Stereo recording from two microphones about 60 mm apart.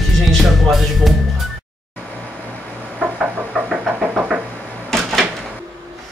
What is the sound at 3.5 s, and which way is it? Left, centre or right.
Vehicle, right.